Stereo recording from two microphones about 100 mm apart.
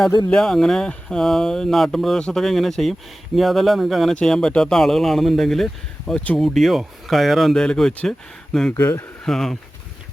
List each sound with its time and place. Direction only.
0.3 s speech: 5° left (ahead or behind)
8.7 s speech: 25° left (ahead or behind)
9.2 s speech: 5° left (ahead or behind)